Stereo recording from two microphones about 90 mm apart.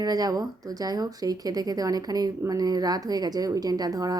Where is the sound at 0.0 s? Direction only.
45° right (ahead or behind).